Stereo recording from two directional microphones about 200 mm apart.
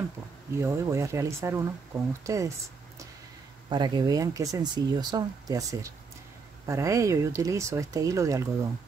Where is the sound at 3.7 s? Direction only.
20° right (ahead or behind).